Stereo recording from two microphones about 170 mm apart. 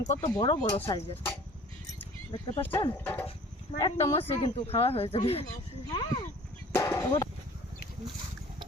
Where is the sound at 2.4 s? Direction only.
30° left (ahead or behind).